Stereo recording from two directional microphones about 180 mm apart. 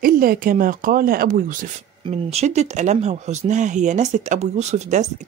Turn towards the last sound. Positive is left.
turn(degrees=-40)  # may be behind; listen again after turning